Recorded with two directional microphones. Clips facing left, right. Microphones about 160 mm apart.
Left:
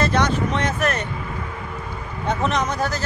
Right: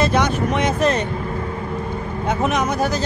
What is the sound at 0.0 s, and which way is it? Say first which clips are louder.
Speech: right 2 dB; 10° right (ahead or behind).